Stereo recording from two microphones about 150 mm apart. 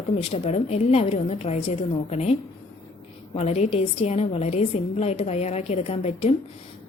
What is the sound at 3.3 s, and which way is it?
A woman's voice, 45° left (ahead or behind).